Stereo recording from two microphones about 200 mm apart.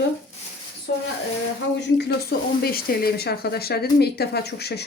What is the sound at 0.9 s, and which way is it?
Speech, 55° left (ahead or behind).